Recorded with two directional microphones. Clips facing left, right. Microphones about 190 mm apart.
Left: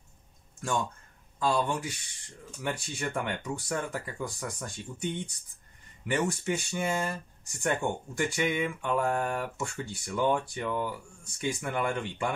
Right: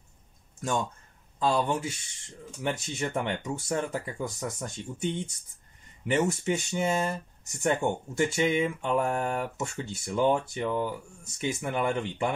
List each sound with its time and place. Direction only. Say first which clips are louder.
1.4 s speech: right 2 dB; 20° right (ahead or behind)